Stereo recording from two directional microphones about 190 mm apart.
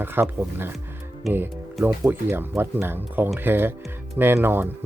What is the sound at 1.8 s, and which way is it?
Speech, 10° right (ahead or behind).